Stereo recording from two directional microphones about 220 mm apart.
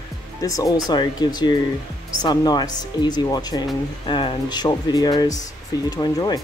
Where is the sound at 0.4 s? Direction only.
15° left (ahead or behind).